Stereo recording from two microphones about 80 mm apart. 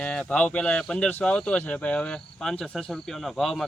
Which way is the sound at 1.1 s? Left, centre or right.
Left.